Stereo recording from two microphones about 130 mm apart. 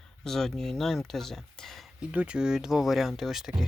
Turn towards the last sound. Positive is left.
turn(degrees=-5)  # may be behind; listen again after turning